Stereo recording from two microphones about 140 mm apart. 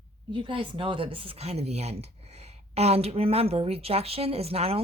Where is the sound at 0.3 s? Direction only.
35° right (ahead or behind).